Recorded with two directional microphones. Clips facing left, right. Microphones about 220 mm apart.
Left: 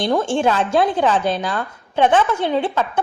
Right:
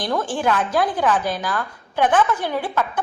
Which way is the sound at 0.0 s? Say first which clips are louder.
Left 5 dB; 25° left (ahead or behind).